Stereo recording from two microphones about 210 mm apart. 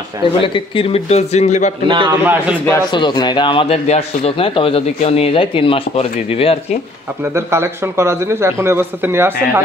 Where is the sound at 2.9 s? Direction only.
20° left (ahead or behind).